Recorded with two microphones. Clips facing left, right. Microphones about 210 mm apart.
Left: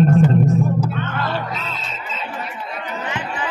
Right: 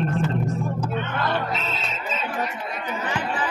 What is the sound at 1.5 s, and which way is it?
Music, 20° right (ahead or behind).